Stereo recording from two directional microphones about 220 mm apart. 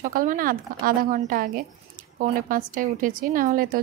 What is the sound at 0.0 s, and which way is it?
A woman's voice, 40° right (ahead or behind).